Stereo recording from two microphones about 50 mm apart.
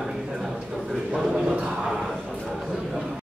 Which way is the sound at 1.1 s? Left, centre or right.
Centre.